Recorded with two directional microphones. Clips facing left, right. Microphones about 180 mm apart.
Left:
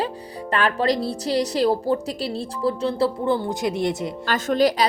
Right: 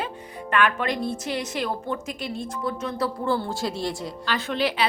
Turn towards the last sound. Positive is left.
turn(degrees=40)  # may be behind; listen again after turning